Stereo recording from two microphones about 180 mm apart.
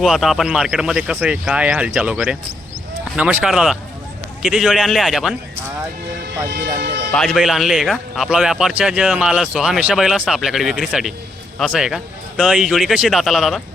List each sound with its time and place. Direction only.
0.0 s speech: centre (ahead or behind)
6.5 s speech: 60° right (ahead or behind)
7.1 s speech: 5° left (ahead or behind)